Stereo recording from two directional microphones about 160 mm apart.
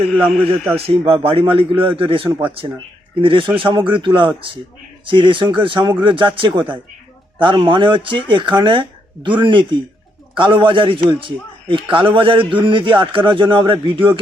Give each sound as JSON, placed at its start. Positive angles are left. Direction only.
{"t": 0.8, "sound": "speech", "side_deg": -35}